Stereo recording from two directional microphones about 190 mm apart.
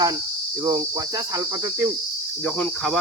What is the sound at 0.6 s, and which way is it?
Cricket, 20° right (ahead or behind).